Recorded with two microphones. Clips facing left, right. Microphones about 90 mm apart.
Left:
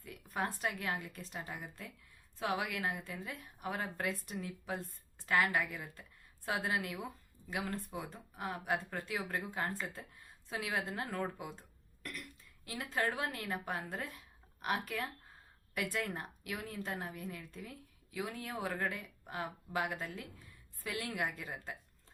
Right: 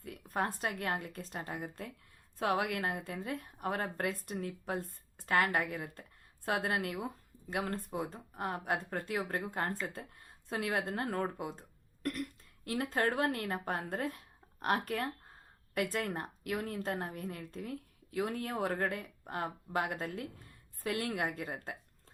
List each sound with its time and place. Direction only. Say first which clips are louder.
0.0 s a woman's voice: right 3 dB; 45° right (ahead or behind)
8.0 s speech: right 4 dB; 45° right (ahead or behind)
12.6 s speech: right 4 dB; 55° right (ahead or behind)